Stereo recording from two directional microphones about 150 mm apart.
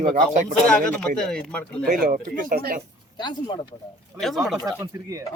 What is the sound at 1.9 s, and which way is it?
Speech, 65° right (ahead or behind).